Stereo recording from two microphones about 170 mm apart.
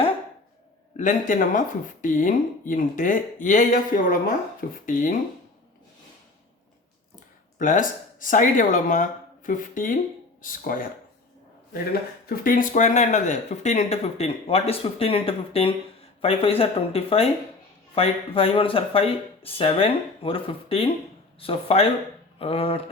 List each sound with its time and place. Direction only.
0.9 s speech: 50° left (ahead or behind)
7.6 s speech: 50° left (ahead or behind)
12.2 s speech: 55° left (ahead or behind); by 22.8 s 35° left (ahead or behind)